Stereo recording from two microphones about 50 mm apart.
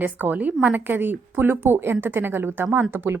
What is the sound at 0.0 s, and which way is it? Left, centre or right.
A woman's voice, right.